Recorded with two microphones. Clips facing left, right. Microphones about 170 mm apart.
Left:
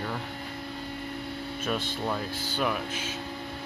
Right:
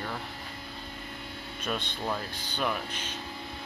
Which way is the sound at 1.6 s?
5° left (ahead or behind).